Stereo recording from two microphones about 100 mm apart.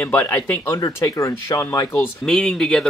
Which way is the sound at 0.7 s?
35° left (ahead or behind).